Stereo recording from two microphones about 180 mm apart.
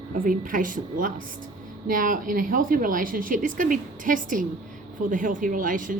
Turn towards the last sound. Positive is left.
turn(degrees=-50)  # may be behind; listen again after turning